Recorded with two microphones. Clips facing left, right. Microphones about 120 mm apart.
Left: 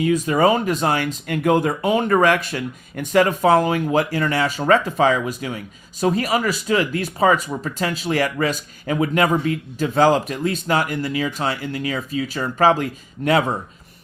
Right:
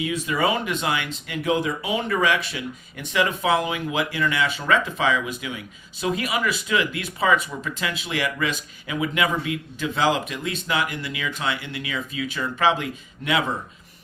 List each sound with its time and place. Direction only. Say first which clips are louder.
0.0 s speech: left 7 dB; 40° left (ahead or behind)